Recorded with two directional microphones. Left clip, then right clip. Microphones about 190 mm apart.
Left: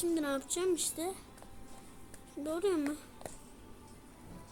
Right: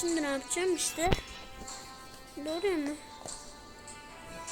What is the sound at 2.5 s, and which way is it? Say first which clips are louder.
Speech: right 1 dB; 5° left (ahead or behind).